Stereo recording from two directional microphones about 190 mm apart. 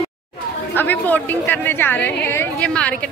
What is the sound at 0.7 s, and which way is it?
Speech, 10° left (ahead or behind).